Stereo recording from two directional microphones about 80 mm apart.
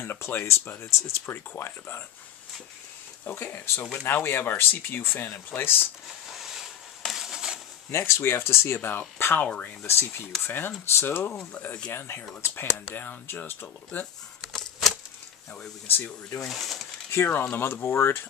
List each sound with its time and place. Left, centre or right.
0.0 s speech: left
3.3 s speech: left
6.0 s a sound: centre
7.9 s speech: left
11.5 s speech: centre
11.9 s speech: left
14.4 s a sound: centre
15.5 s speech: centre
16.4 s speech: centre
17.1 s speech: left